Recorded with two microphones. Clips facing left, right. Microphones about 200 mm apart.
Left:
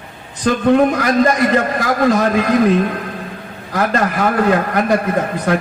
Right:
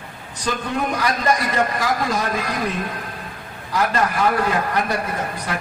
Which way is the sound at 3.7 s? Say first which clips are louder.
Left 3 dB; 50° left (ahead or behind).